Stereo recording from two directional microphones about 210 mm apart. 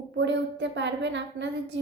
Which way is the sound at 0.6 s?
60° right (ahead or behind).